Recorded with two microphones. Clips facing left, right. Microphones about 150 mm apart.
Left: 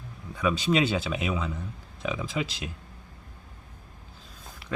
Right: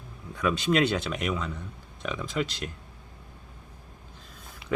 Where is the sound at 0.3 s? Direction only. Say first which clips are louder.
Even; centre (ahead or behind).